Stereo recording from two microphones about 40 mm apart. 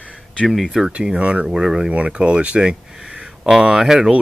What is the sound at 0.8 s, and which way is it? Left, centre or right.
Speech, right.